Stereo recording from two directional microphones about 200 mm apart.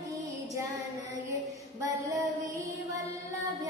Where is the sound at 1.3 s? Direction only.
15° right (ahead or behind).